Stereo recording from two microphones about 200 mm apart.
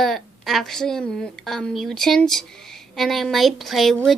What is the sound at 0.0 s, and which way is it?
A woman's voice, centre (ahead or behind).